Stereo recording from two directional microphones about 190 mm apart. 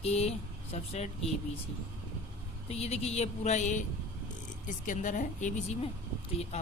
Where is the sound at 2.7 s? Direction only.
35° left (ahead or behind).